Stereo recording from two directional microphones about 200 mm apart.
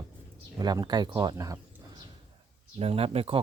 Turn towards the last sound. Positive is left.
turn(degrees=-30)  # may be behind; listen again after turning